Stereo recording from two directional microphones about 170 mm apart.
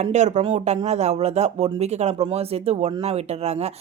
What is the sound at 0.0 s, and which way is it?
Speech, 45° right (ahead or behind).